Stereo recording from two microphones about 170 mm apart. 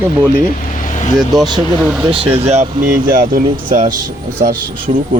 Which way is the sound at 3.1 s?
55° right (ahead or behind).